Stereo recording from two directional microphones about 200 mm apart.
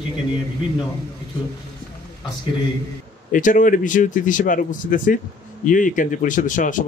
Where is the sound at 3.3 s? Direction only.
40° left (ahead or behind).